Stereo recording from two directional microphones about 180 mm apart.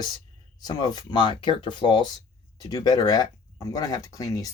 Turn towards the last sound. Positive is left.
turn(degrees=20)  # may be behind; listen again after turning